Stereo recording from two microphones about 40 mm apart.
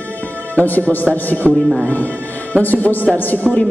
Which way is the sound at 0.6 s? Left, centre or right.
Left.